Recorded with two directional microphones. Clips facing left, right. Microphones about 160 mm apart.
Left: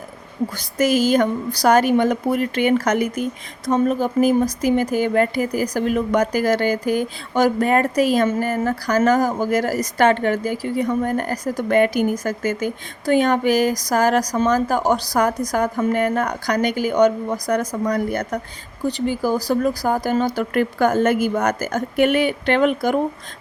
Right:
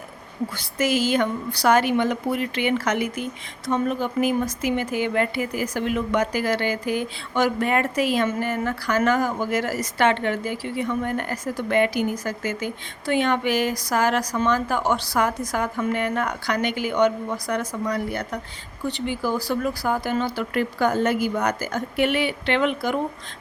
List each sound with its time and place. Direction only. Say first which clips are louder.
0.5 s a woman's voice: left 5 dB; 40° left (ahead or behind)